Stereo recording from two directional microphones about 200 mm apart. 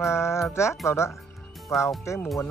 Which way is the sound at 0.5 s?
15° left (ahead or behind).